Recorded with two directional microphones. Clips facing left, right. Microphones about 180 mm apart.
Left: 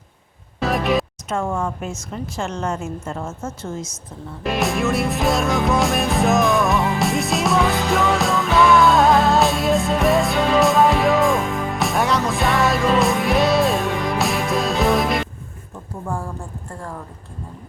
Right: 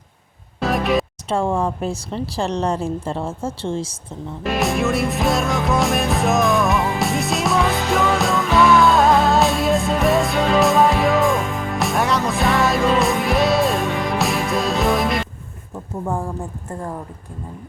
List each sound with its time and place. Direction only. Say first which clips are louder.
0.6 s music: right 1 dB; centre (ahead or behind)
1.3 s a woman's voice: right 4 dB; 30° right (ahead or behind)
4.4 s music: right 1 dB; centre (ahead or behind)
16.0 s a woman's voice: right 3 dB; 20° right (ahead or behind)